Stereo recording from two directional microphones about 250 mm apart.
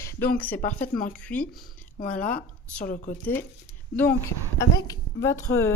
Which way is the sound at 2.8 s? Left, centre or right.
Left.